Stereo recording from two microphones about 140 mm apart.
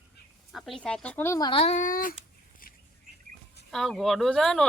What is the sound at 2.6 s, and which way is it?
Bird, 90° left.